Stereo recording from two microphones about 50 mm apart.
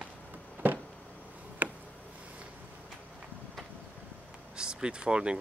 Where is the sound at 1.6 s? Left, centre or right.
Right.